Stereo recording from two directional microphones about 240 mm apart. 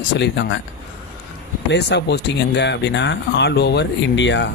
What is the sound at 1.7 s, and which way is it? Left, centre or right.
Speech, left.